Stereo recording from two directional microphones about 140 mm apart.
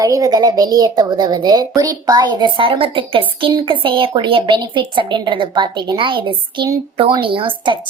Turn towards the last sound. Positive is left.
turn(degrees=-35)  # may be behind; listen again after turning